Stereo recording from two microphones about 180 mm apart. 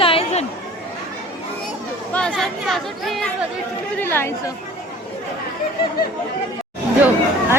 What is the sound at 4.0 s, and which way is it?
Speech, 10° left (ahead or behind).